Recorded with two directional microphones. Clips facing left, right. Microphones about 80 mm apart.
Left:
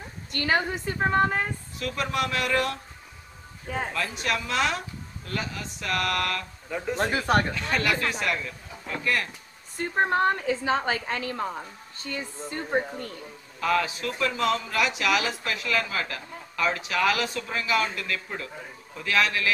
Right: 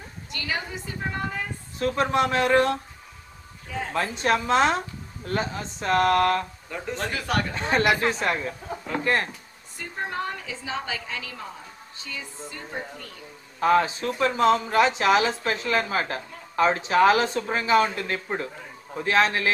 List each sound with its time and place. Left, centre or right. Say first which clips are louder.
0.3 s a woman's voice: left 6 dB; left
1.8 s speech: right 6 dB; right
3.6 s a woman's voice: left 1 dB; left
3.9 s a man's voice: right 9 dB; right
6.7 s speech: left 4 dB; centre
7.1 s speech: left 3 dB; left
7.5 s a man's voice: right 4 dB; right
8.6 s a sound: right 4 dB; right
9.8 s a woman's voice: left 7 dB; left
13.6 s a man's voice: right 5 dB; right